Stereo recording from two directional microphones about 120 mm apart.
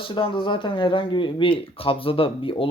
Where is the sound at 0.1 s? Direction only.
45° left (ahead or behind).